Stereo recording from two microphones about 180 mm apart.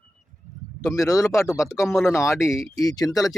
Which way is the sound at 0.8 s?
15° left (ahead or behind).